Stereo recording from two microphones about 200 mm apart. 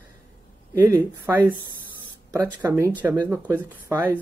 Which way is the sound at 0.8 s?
10° right (ahead or behind).